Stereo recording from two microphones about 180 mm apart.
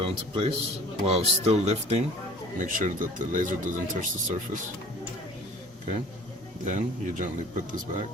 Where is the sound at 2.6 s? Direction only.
45° right (ahead or behind).